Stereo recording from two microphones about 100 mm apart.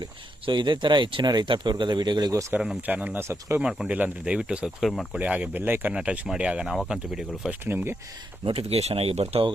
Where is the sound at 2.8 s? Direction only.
15° right (ahead or behind).